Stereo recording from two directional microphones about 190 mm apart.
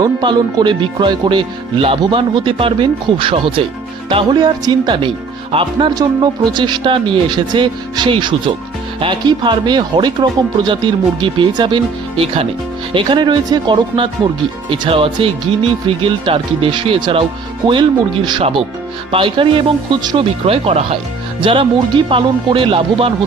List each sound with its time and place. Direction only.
0.0 s speech: 20° right (ahead or behind)